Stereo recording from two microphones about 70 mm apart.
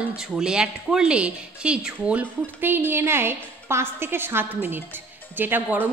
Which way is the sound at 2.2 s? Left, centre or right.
Right.